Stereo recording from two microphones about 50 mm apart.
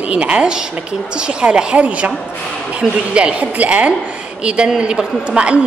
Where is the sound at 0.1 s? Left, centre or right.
Right.